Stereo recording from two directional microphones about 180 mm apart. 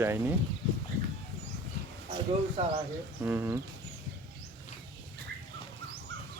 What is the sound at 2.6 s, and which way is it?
Speech, 30° right (ahead or behind).